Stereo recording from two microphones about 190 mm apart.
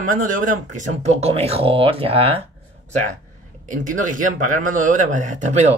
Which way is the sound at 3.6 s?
45° right (ahead or behind).